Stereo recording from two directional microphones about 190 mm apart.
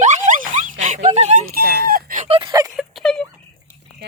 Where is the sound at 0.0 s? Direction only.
40° right (ahead or behind).